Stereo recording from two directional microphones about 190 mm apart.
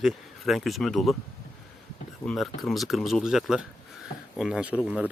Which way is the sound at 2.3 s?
Centre (ahead or behind).